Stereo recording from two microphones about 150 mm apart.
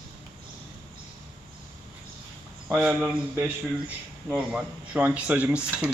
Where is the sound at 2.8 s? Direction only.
10° right (ahead or behind).